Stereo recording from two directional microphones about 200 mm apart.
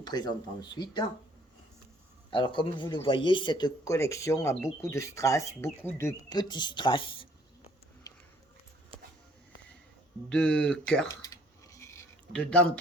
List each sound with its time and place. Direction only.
0.0 s speech: 20° left (ahead or behind)
2.3 s speech: 25° left (ahead or behind)
8.1 s music: 20° left (ahead or behind)
10.2 s speech: 5° left (ahead or behind)
11.1 s dishes: 15° left (ahead or behind)
12.3 s speech: 5° left (ahead or behind)